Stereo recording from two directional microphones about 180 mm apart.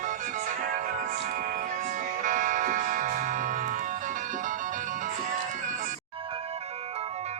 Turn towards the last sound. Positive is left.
turn(degrees=-35)  # may be behind; listen again after turning